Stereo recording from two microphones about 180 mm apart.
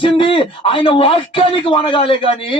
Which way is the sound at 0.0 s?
30° left (ahead or behind).